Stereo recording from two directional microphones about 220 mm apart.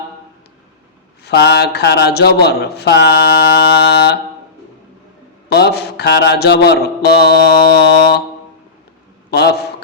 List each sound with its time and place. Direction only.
1.2 s speech: 50° left (ahead or behind)
5.5 s speech: 45° left (ahead or behind)
9.3 s a man's voice: 45° left (ahead or behind)